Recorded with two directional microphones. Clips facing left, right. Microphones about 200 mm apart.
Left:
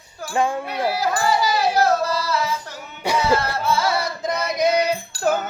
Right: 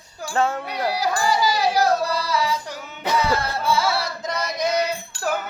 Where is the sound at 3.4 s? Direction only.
10° right (ahead or behind).